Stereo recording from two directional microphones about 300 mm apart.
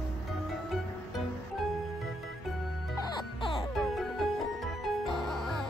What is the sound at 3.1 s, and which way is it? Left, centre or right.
Music, centre.